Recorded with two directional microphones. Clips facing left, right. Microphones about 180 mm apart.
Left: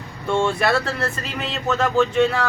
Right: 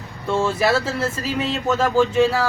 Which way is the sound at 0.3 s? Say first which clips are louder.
Even; 5° right (ahead or behind).